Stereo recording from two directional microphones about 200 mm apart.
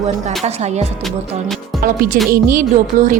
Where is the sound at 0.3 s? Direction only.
35° right (ahead or behind).